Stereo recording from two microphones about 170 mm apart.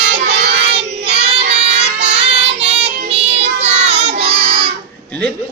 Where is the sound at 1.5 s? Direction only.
40° right (ahead or behind).